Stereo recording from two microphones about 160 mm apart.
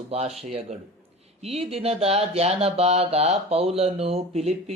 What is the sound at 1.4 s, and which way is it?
Speech, 40° right (ahead or behind).